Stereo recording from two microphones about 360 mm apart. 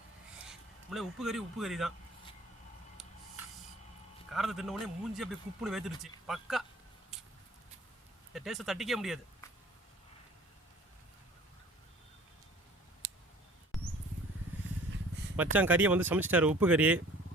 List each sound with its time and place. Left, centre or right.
0.4 s speech: centre
4.3 s a man's voice: centre
8.3 s speech: centre
13.0 s clicking: right
13.7 s rodents: centre
15.5 s a man's voice: centre